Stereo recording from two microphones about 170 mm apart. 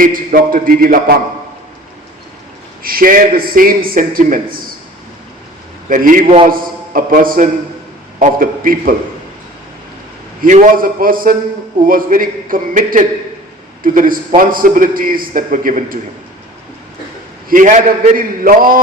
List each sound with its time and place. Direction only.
0.0 s a man's voice: 55° right (ahead or behind)
2.8 s a man's voice: 55° right (ahead or behind)
5.9 s a man's voice: 55° right (ahead or behind)
6.2 s a man's voice: 35° right (ahead or behind)
6.5 s a man's voice: 55° right (ahead or behind)
10.4 s a man's voice: 50° right (ahead or behind)
17.5 s a man's voice: 50° right (ahead or behind)